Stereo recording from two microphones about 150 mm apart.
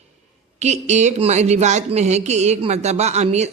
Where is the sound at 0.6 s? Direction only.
50° right (ahead or behind).